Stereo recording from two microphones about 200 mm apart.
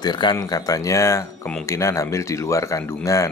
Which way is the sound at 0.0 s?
20° left (ahead or behind).